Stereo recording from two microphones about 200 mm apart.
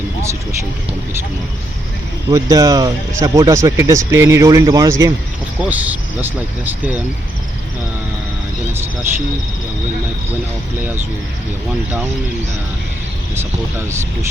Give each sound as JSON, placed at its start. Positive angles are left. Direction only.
{"t": 2.3, "sound": "speech", "side_deg": -15}
{"t": 13.3, "sound": "speech", "side_deg": -10}